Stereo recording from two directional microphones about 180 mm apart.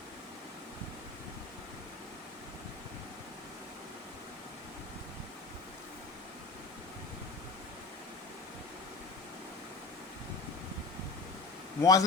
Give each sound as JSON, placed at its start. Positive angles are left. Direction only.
{"t": 11.8, "sound": "speech", "side_deg": 20}